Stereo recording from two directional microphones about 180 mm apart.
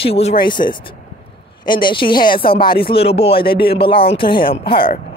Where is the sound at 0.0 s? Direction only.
35° left (ahead or behind).